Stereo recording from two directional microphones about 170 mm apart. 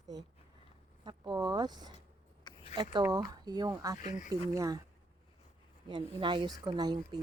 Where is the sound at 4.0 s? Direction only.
45° left (ahead or behind).